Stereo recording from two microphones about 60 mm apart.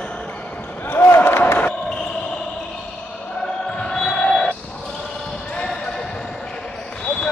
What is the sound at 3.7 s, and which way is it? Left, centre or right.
Basketball bounce, centre.